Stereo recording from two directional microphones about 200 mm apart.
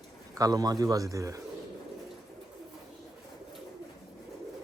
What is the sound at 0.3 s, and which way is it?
Speech, 20° right (ahead or behind).